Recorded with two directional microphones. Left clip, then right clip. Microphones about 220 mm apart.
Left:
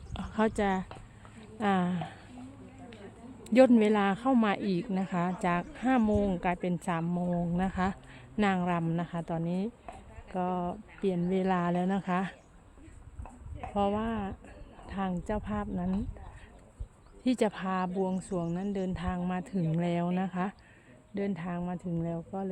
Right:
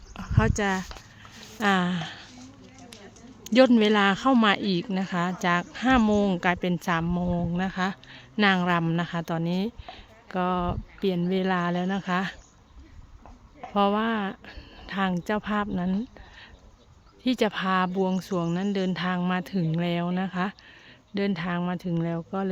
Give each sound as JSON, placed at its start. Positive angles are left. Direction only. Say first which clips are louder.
{"t": 0.2, "sound": "a woman's voice", "louder": "right 3 dB", "side_deg": 0}
{"t": 3.4, "sound": "speech", "louder": "right 3 dB", "side_deg": -10}
{"t": 13.7, "sound": "speech", "louder": "right 7 dB", "side_deg": -20}
{"t": 17.2, "sound": "speech", "louder": "right 5 dB", "side_deg": -10}